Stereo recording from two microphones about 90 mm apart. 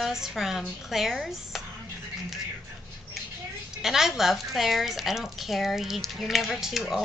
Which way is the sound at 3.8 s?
5° right (ahead or behind).